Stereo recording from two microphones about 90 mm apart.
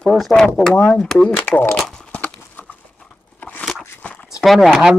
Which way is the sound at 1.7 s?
10° left (ahead or behind).